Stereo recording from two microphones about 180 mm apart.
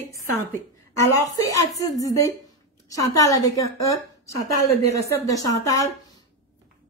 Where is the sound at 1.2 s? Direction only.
20° left (ahead or behind).